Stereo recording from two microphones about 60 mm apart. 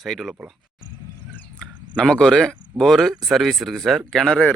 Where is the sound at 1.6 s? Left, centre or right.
Centre.